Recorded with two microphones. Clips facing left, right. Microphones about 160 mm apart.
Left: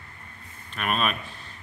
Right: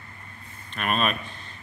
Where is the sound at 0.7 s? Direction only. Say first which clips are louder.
Right 1 dB; centre (ahead or behind).